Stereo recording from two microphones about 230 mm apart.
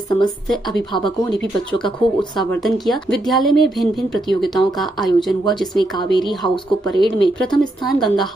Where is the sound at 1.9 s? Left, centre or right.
Left.